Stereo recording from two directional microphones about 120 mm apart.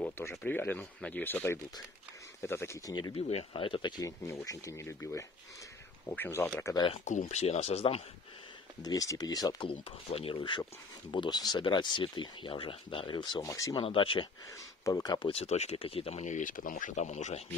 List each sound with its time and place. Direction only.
0.0 s speech: 15° left (ahead or behind)
2.9 s speech: 35° left (ahead or behind)
3.2 s speech: 55° left (ahead or behind)
4.0 s speech: 25° left (ahead or behind)
7.1 s speech: 80° left; by 8.0 s 60° left (ahead or behind)
8.8 s speech: 30° left (ahead or behind)
9.7 s speech: 50° left (ahead or behind); by 13.7 s 30° left (ahead or behind)
13.7 s speech: 45° left (ahead or behind)
14.9 s speech: 30° left (ahead or behind)
15.1 s speech: 50° left (ahead or behind); by 17.5 s 70° left (ahead or behind)